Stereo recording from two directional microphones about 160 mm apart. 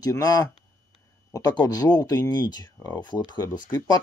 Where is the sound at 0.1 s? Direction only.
20° left (ahead or behind).